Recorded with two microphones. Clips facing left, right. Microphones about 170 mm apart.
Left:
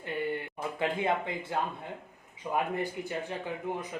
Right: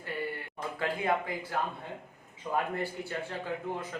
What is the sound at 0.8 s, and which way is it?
Speech, 25° left (ahead or behind).